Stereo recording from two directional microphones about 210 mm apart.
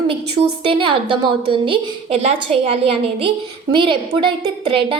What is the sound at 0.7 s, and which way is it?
A woman's voice, 25° right (ahead or behind).